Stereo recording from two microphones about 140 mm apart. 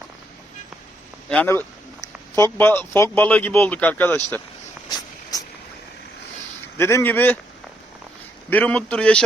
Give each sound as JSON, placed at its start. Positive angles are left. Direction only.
{"t": 1.3, "sound": "speech", "side_deg": 10}
{"t": 4.9, "sound": "a sound", "side_deg": 30}
{"t": 6.7, "sound": "speech", "side_deg": 15}
{"t": 8.4, "sound": "speech", "side_deg": 10}